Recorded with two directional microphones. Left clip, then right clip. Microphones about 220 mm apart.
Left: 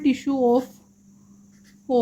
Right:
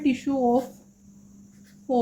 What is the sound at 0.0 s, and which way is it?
Speech, 45° left (ahead or behind).